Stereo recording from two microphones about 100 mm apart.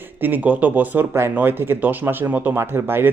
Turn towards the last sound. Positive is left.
turn(degrees=-25)  # may be behind; listen again after turning